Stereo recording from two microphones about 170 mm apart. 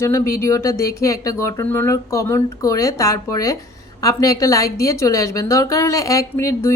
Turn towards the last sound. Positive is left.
turn(degrees=20)  # may be behind; listen again after turning